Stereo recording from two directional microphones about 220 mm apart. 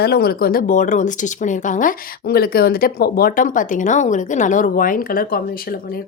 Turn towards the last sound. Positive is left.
turn(degrees=40)  # may be behind; listen again after turning